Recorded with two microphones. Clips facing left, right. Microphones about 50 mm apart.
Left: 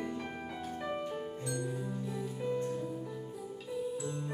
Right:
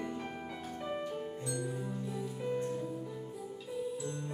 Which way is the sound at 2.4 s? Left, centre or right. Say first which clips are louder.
Left 1 dB; centre.